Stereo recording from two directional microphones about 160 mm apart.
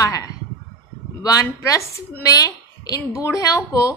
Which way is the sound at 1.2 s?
20° left (ahead or behind).